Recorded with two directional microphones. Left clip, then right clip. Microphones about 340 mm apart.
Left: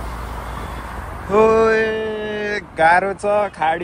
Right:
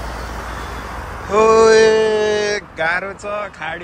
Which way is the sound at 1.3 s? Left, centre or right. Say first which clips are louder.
Right 3 dB; centre.